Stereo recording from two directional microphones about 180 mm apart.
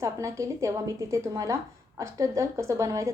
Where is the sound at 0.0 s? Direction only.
15° right (ahead or behind).